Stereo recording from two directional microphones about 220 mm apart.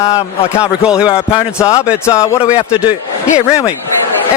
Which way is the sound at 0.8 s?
5° right (ahead or behind).